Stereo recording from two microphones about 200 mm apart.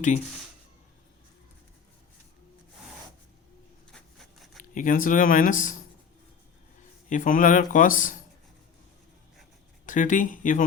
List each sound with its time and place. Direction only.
4.7 s speech: 40° left (ahead or behind)
7.1 s speech: 40° left (ahead or behind)
9.8 s speech: 40° left (ahead or behind)